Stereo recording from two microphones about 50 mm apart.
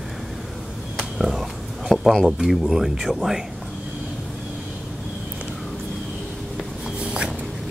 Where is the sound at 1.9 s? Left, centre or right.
Centre.